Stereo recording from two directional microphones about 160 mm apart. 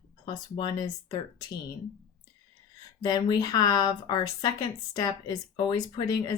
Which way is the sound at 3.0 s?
25° left (ahead or behind).